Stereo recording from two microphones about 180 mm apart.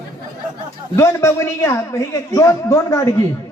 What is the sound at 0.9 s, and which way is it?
A man's voice, 15° left (ahead or behind).